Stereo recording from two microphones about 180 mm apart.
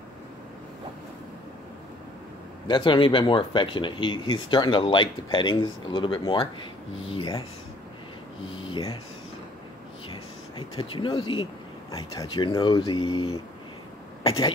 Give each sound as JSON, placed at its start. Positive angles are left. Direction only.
{"t": 2.7, "sound": "speech", "side_deg": 25}
{"t": 8.6, "sound": "speech", "side_deg": 30}
{"t": 10.8, "sound": "speech", "side_deg": 30}